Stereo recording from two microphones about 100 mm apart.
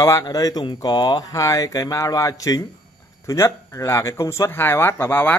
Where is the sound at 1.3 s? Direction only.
35° left (ahead or behind).